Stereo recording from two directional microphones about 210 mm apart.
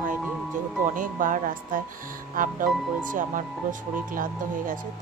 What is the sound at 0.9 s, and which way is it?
A woman's voice, 40° right (ahead or behind).